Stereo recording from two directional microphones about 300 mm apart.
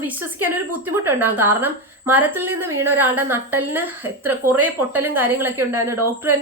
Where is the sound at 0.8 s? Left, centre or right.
Centre.